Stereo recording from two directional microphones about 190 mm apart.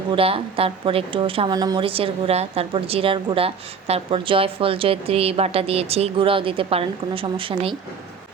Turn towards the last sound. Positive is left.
turn(degrees=-30)  # may be behind; listen again after turning